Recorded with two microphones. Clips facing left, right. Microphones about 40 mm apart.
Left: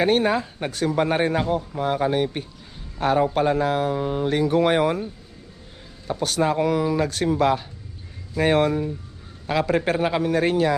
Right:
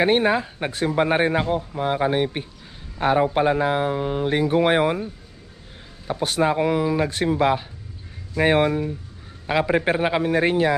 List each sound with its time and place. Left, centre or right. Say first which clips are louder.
0.0 s speech: right 1 dB; centre
6.1 s speech: right 1 dB; right